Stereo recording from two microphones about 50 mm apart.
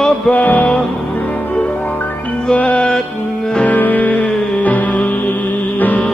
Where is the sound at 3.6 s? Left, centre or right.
Left.